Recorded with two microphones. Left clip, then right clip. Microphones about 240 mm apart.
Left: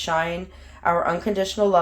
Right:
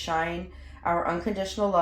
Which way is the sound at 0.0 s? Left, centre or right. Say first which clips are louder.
Left 5 dB; left.